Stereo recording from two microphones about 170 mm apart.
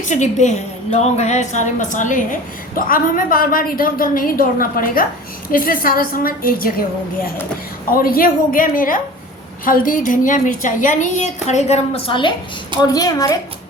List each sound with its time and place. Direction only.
0.0 s a woman's voice: 45° left (ahead or behind)
7.9 s a woman's voice: 60° left (ahead or behind); by 13.3 s 20° left (ahead or behind)